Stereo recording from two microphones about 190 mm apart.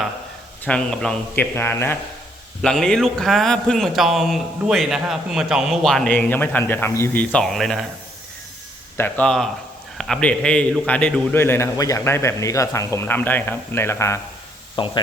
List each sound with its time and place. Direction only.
0.6 s a man's voice: 5° left (ahead or behind)
2.6 s a man's voice: centre (ahead or behind)
7.3 s a man's voice: centre (ahead or behind)
9.0 s a man's voice: 10° left (ahead or behind)
14.8 s speech: 25° left (ahead or behind)